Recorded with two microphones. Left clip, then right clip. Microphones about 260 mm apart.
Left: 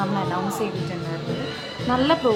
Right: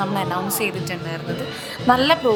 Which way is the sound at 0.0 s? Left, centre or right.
Right.